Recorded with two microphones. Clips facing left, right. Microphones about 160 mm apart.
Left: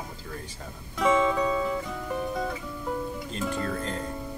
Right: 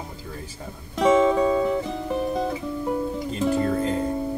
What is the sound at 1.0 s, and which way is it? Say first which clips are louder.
Music: right 6 dB; 25° right (ahead or behind).